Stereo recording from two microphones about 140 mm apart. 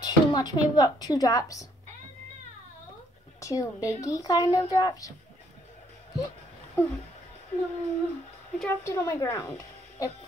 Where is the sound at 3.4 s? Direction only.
25° left (ahead or behind).